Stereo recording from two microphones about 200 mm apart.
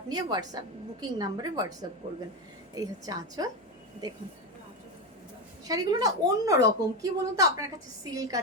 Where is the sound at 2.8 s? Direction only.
20° right (ahead or behind).